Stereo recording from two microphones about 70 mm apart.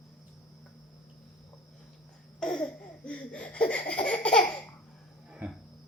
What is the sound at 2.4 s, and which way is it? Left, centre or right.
Laughter, centre.